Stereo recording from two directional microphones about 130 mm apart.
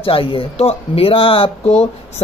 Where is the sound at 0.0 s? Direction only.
45° left (ahead or behind).